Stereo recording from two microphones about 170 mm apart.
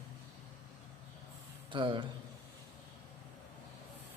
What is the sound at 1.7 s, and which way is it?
Speech, 30° right (ahead or behind).